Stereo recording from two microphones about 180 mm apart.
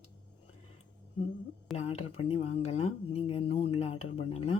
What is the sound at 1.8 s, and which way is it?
Speech, 35° left (ahead or behind).